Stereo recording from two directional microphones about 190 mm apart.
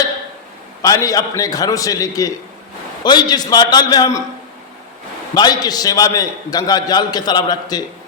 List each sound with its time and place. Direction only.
0.8 s a man's voice: 15° left (ahead or behind)
5.3 s a man's voice: 20° left (ahead or behind)